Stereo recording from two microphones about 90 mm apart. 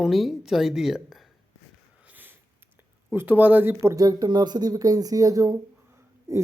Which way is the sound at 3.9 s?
40° right (ahead or behind).